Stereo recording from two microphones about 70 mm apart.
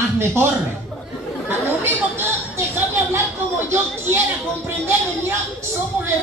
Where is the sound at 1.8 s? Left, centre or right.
Right.